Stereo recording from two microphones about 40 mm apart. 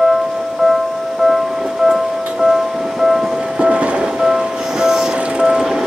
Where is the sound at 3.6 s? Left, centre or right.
Right.